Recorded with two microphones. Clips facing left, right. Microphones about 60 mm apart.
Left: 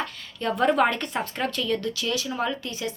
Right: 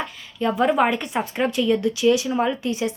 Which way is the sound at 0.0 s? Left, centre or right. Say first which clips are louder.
Right 5 dB; centre.